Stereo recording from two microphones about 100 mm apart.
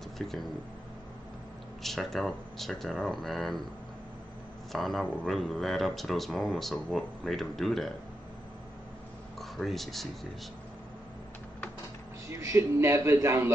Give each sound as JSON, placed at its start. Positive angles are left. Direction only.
{"t": 0.2, "sound": "speech", "side_deg": 5}
{"t": 1.8, "sound": "speech", "side_deg": 0}
{"t": 4.7, "sound": "speech", "side_deg": 0}
{"t": 9.4, "sound": "speech", "side_deg": 0}
{"t": 12.3, "sound": "a man's voice", "side_deg": -30}